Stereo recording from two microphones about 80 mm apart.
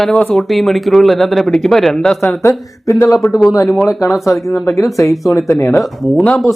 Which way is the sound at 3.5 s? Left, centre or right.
Left.